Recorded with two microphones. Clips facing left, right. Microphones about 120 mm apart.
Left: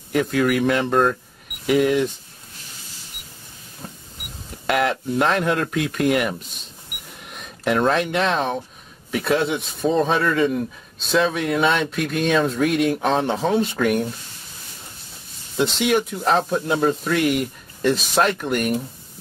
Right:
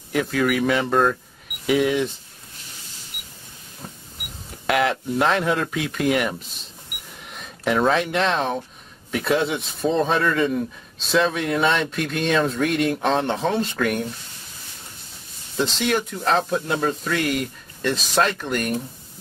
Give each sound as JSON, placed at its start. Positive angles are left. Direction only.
{"t": 0.1, "sound": "speech", "side_deg": 0}
{"t": 4.6, "sound": "speech", "side_deg": 0}
{"t": 15.5, "sound": "speech", "side_deg": 5}